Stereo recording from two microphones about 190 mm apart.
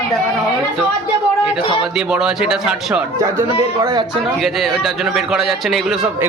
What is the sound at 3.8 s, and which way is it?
Speech, 20° right (ahead or behind).